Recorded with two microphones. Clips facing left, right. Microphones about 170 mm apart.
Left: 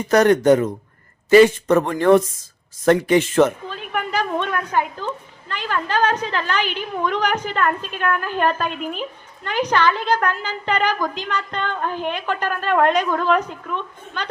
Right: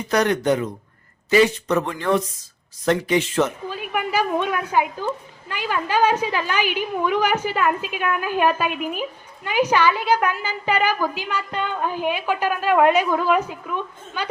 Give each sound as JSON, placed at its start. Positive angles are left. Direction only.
{"t": 0.1, "sound": "speech", "side_deg": 45}
{"t": 3.7, "sound": "a woman's voice", "side_deg": -10}